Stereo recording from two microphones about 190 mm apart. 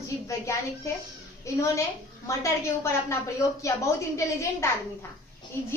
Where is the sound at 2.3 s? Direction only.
15° left (ahead or behind).